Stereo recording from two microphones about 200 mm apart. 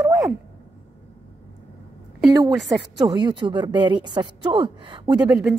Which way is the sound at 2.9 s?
20° right (ahead or behind).